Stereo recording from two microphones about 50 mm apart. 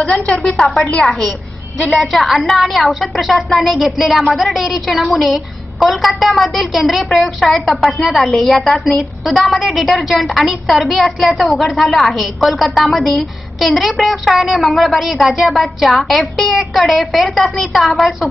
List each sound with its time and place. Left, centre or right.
0.0 s a woman's voice: left
2.5 s a woman's voice: centre